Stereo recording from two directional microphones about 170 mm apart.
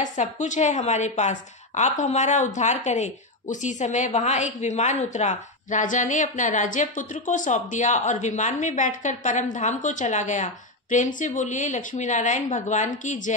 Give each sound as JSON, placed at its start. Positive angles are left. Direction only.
{"t": 0.0, "sound": "a woman's voice", "side_deg": 45}